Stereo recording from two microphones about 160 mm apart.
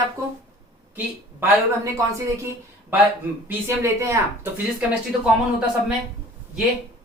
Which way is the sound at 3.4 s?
15° right (ahead or behind).